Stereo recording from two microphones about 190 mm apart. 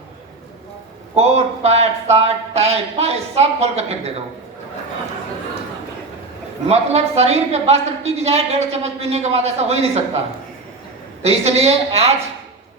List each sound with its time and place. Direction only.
1.1 s a woman's voice: 35° right (ahead or behind)
6.7 s a woman's voice: 35° right (ahead or behind)
11.2 s a woman's voice: 35° right (ahead or behind)